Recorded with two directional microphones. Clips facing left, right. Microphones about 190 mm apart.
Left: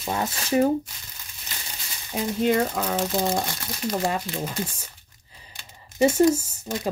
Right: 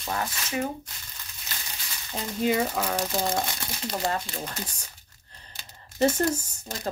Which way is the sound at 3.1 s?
15° left (ahead or behind).